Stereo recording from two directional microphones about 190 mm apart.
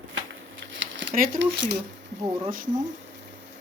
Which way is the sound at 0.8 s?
75° right (ahead or behind).